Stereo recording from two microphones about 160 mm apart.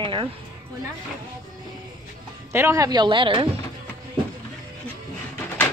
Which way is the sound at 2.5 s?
15° right (ahead or behind).